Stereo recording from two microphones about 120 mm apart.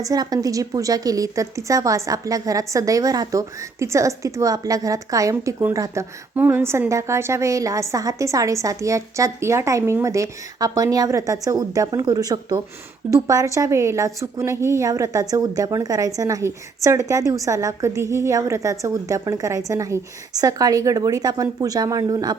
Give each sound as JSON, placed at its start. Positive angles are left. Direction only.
{"t": 0.0, "sound": "a woman's voice", "side_deg": -30}